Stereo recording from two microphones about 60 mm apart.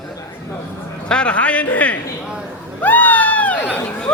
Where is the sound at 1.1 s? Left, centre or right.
Centre.